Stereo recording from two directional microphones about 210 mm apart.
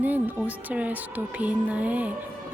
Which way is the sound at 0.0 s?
10° right (ahead or behind).